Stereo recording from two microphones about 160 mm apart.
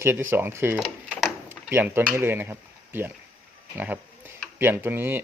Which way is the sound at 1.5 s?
15° right (ahead or behind).